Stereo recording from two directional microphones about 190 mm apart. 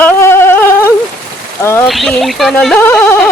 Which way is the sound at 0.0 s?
10° left (ahead or behind).